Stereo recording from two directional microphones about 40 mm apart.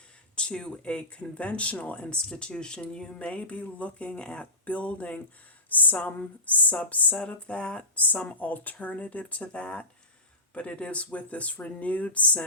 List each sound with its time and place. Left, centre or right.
0.3 s speech: left
7.9 s speech: left